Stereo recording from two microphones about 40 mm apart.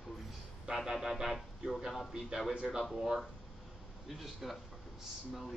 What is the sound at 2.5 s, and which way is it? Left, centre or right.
Speech, right.